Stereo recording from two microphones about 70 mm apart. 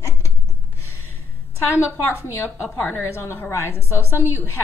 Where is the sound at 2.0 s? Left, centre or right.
Left.